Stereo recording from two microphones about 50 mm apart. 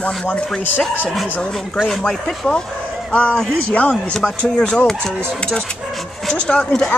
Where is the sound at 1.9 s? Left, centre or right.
Centre.